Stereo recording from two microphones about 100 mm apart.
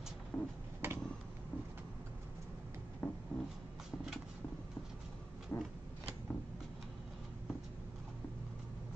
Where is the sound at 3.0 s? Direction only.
20° left (ahead or behind).